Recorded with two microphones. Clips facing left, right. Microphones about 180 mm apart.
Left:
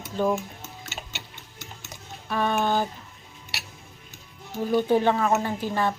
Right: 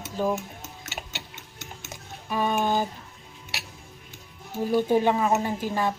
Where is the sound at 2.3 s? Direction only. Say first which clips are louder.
Even; 10° right (ahead or behind).